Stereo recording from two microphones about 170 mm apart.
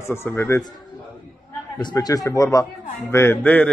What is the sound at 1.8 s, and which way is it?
Speech, 20° left (ahead or behind).